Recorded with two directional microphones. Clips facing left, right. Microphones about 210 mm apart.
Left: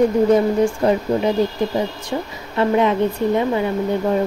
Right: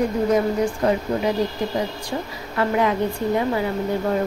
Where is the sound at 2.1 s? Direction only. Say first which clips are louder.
Left 4 dB; 25° left (ahead or behind).